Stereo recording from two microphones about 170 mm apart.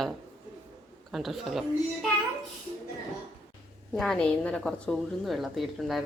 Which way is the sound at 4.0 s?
5° left (ahead or behind).